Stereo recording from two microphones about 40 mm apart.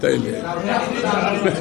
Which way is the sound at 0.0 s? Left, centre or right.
Centre.